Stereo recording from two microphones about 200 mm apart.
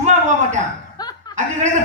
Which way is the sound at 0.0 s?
35° right (ahead or behind).